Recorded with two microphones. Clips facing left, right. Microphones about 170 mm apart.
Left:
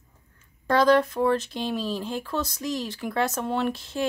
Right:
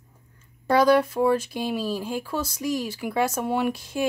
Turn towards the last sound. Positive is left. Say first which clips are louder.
# right 2 dB
turn(degrees=-10)  # may be behind; listen again after turning